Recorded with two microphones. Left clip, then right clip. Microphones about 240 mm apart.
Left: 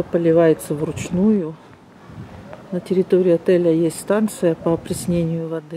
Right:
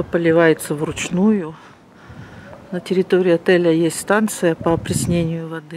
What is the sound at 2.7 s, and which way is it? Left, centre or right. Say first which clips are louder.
Speech: even; centre.